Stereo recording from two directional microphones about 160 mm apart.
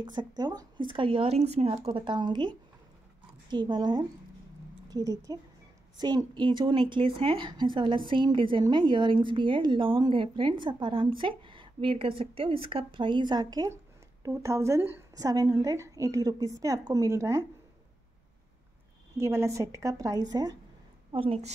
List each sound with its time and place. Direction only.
0.0 s a woman's voice: 30° right (ahead or behind)
19.1 s a woman's voice: 20° right (ahead or behind); by 21.5 s 35° right (ahead or behind)